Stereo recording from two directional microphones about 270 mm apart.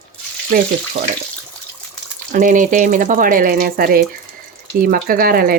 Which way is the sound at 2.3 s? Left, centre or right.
Right.